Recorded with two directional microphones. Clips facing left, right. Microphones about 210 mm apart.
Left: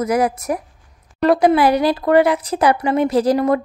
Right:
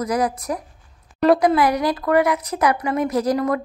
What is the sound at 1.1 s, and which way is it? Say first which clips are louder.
Speech: even; centre (ahead or behind).